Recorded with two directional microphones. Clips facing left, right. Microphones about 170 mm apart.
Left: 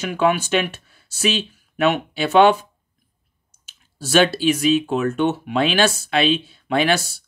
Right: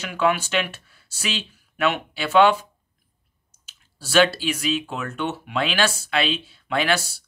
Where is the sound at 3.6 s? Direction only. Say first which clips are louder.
Left 9 dB; 20° left (ahead or behind).